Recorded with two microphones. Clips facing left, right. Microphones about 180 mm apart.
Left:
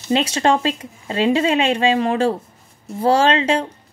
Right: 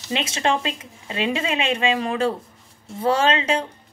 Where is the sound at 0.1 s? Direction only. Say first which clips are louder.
Left 6 dB; 35° left (ahead or behind).